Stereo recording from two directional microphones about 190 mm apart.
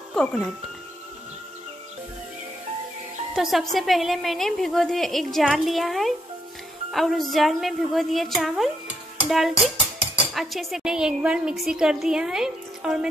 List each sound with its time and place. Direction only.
0.1 s speech: centre (ahead or behind)
3.3 s a woman's voice: centre (ahead or behind)